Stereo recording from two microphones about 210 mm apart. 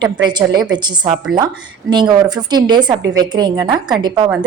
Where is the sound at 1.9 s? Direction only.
20° right (ahead or behind).